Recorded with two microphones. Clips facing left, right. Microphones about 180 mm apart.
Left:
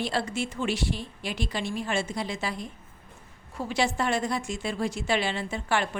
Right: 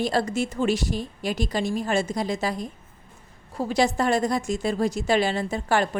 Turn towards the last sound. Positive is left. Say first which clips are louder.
# right 5 dB
turn(degrees=-40)  # may be behind; listen again after turning